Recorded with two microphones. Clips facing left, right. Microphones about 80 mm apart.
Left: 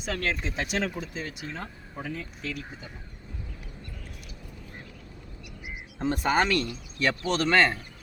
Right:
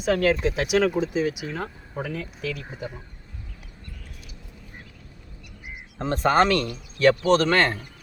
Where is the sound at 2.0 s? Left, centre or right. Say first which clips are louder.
Right 4 dB; right.